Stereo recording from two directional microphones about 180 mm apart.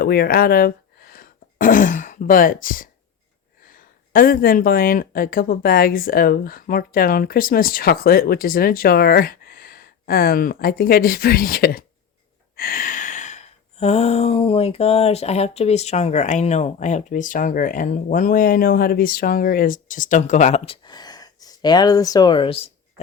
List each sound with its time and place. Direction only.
0.0 s speech: 60° left (ahead or behind)
3.7 s a sound: 50° left (ahead or behind)
20.8 s speech: 25° left (ahead or behind)